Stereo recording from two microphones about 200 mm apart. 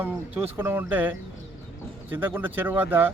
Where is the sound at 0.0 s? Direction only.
10° right (ahead or behind).